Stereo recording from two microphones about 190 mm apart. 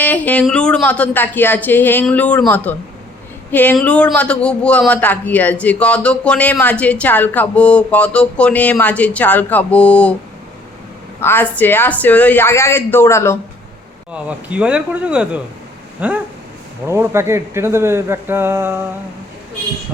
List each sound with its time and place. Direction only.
0.0 s a man's voice: 10° left (ahead or behind)
11.2 s a man's voice: 10° left (ahead or behind)
14.1 s speech: 5° right (ahead or behind)
16.0 s a sound: 5° right (ahead or behind)
16.8 s speech: 15° right (ahead or behind)